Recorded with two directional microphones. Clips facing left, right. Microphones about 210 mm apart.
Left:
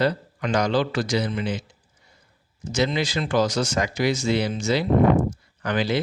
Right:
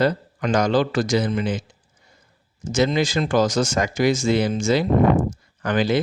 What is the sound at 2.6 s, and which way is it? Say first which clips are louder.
Speech: right 4 dB; 45° right (ahead or behind).